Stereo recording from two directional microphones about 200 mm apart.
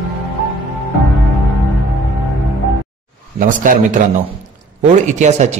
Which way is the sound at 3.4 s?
40° right (ahead or behind).